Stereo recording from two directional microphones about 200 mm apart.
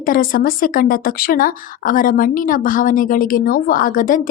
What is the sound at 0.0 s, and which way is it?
Speech, 45° left (ahead or behind).